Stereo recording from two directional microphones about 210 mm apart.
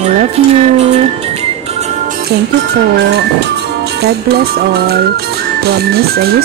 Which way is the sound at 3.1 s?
50° right (ahead or behind).